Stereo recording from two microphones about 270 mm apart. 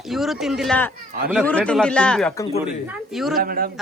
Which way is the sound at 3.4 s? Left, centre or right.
Right.